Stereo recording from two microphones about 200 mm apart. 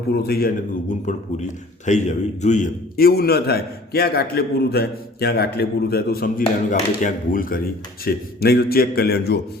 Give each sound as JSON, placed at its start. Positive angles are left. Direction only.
{"t": 0.1, "sound": "a man's voice", "side_deg": 50}